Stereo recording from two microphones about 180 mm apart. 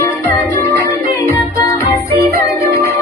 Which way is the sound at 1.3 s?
15° left (ahead or behind).